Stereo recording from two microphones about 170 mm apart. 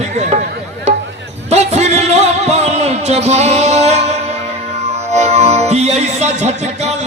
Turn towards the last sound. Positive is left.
turn(degrees=-40)  # may be behind; listen again after turning